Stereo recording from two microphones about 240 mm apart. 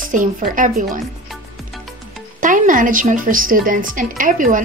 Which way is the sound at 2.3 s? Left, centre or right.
Right.